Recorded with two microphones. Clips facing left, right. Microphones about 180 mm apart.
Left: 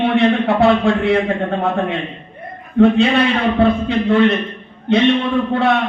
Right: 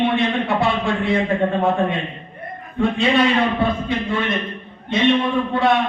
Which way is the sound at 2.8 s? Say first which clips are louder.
Left 5 dB; 65° left (ahead or behind).